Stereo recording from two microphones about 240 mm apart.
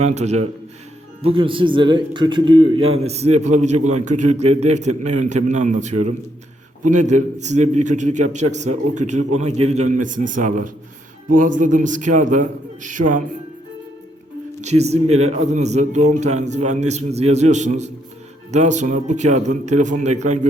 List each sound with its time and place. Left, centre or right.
0.0 s a man's voice: right
14.6 s a man's voice: right